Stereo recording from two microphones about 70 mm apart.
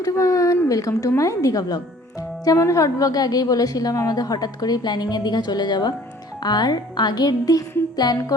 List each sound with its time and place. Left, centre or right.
0.0 s a woman's voice: left